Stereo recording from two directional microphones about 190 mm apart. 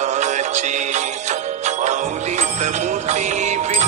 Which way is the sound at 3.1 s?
35° right (ahead or behind).